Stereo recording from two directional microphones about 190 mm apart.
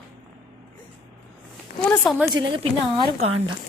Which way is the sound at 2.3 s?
25° right (ahead or behind).